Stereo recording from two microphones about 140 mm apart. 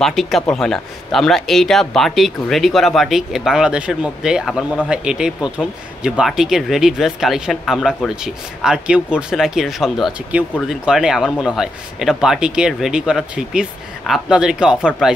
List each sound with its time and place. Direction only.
0.0 s a man's voice: centre (ahead or behind)